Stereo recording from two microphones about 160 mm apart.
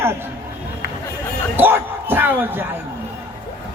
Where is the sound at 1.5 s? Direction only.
10° right (ahead or behind).